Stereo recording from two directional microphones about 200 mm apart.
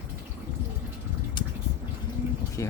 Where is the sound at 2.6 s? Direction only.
15° left (ahead or behind).